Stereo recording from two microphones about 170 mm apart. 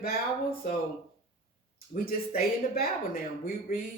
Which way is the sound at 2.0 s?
60° left (ahead or behind).